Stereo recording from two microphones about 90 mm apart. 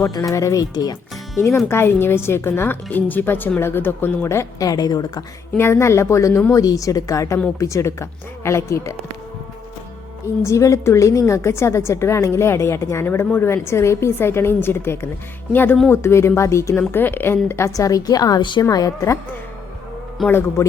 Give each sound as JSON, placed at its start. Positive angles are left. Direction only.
{"t": 0.0, "sound": "a woman's voice", "side_deg": 35}
{"t": 1.4, "sound": "speech", "side_deg": 30}
{"t": 4.7, "sound": "a woman's voice", "side_deg": 45}
{"t": 5.5, "sound": "a woman's voice", "side_deg": 30}
{"t": 10.4, "sound": "a woman's voice", "side_deg": 35}
{"t": 16.9, "sound": "speech", "side_deg": 20}
{"t": 17.7, "sound": "a woman's voice", "side_deg": 40}
{"t": 18.7, "sound": "a woman's voice", "side_deg": 45}